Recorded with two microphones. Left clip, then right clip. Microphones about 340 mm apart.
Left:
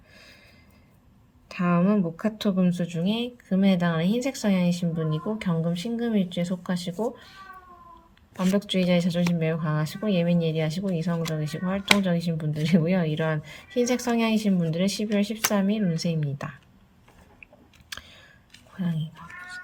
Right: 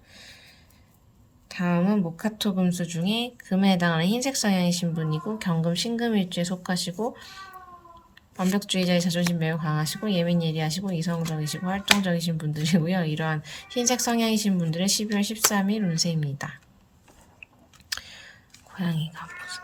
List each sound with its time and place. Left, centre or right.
1.5 s speech: centre
8.4 s speech: centre
17.8 s a sound: centre
18.8 s speech: centre